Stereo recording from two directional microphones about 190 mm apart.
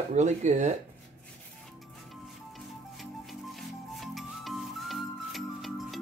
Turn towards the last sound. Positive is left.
turn(degrees=0)  # may be behind; listen again after turning